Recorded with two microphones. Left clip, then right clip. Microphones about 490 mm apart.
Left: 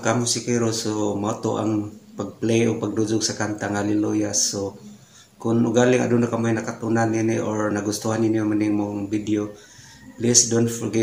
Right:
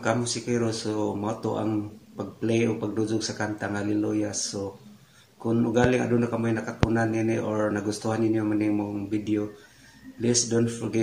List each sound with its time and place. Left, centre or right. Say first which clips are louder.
0.0 s speech: left 4 dB; right